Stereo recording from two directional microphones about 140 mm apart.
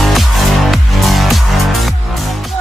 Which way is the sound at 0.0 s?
Centre (ahead or behind).